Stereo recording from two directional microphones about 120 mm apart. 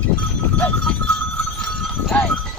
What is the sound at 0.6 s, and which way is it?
Sheep, 10° left (ahead or behind).